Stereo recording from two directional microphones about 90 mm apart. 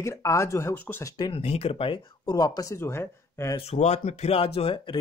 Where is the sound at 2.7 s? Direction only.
30° left (ahead or behind).